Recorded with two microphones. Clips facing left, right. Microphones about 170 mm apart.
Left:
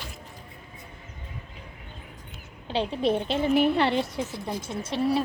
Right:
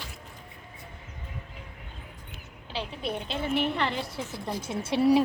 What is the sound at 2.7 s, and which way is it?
A woman's voice, 30° left (ahead or behind).